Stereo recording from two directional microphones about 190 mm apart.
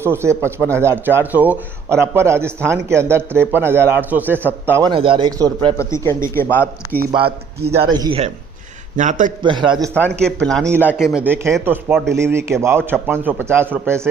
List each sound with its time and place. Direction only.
0.0 s speech: 15° right (ahead or behind)
4.9 s a man's voice: 25° right (ahead or behind)
5.7 s a man's voice: 15° left (ahead or behind)
7.8 s a man's voice: 25° right (ahead or behind)
9.0 s a man's voice: 40° right (ahead or behind)
9.4 s a man's voice: 25° right (ahead or behind)
9.9 s speech: 5° left (ahead or behind); by 14.1 s 15° right (ahead or behind)